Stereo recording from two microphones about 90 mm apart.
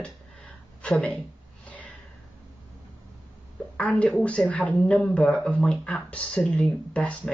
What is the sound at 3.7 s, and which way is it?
A woman's voice, 10° left (ahead or behind).